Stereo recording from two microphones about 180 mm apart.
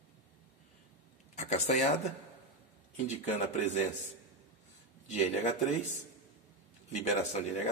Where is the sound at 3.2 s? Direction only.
40° left (ahead or behind).